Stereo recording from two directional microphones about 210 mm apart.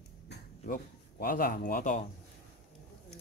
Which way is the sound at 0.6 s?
40° left (ahead or behind).